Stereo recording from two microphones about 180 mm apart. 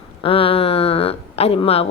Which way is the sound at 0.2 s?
30° left (ahead or behind).